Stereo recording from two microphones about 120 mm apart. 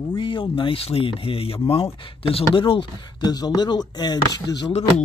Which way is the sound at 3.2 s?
35° left (ahead or behind).